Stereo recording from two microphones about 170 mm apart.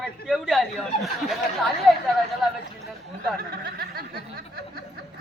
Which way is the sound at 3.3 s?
65° right (ahead or behind).